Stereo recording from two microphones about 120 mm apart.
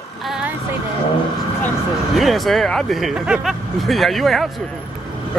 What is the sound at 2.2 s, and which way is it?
Speech, centre (ahead or behind).